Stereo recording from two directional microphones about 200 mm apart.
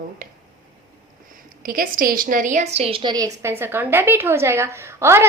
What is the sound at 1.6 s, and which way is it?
A woman's voice, 45° right (ahead or behind).